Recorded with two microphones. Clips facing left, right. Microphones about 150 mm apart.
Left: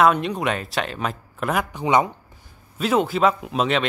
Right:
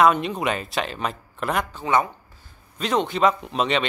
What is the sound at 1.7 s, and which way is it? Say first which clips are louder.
Speech: left 5 dB; 15° left (ahead or behind).